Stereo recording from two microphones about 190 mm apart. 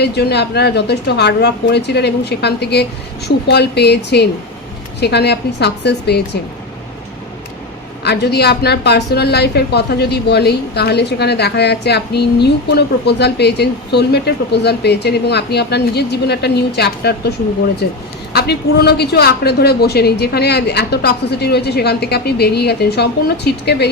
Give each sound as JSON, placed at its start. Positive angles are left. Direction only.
{"t": 0.0, "sound": "a woman's voice", "side_deg": 60}
{"t": 8.0, "sound": "a woman's voice", "side_deg": 60}